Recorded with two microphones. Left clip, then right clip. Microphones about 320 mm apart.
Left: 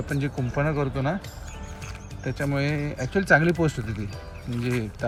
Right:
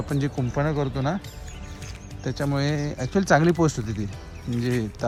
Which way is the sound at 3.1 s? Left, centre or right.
Centre.